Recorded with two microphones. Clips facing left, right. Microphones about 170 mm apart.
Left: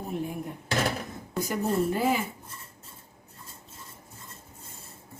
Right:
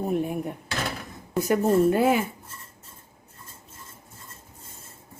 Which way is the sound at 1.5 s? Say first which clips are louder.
Right 7 dB; 65° right (ahead or behind).